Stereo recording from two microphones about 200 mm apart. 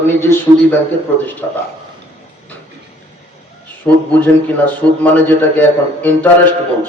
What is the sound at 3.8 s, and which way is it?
A man's voice, 10° left (ahead or behind).